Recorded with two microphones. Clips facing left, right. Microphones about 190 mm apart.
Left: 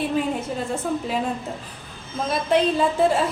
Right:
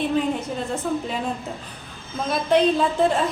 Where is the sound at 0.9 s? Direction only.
5° left (ahead or behind).